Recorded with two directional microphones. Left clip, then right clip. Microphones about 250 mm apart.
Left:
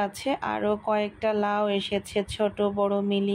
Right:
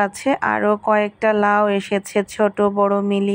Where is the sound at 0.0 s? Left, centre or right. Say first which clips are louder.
Right 9 dB; right.